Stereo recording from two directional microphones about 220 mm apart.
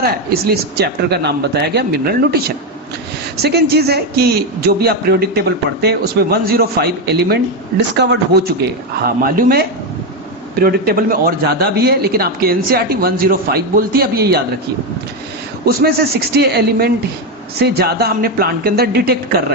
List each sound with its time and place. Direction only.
0.0 s a man's voice: 45° right (ahead or behind)
3.4 s a man's voice: 45° right (ahead or behind)
15.6 s a man's voice: 45° right (ahead or behind)